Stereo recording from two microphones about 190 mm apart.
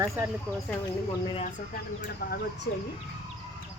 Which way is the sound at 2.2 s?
65° left (ahead or behind).